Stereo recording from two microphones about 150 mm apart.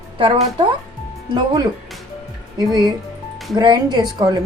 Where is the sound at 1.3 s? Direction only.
25° right (ahead or behind).